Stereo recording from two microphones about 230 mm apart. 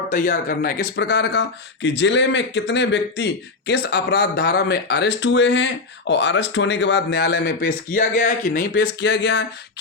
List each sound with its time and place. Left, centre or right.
0.1 s speech: left
8.8 s speech: left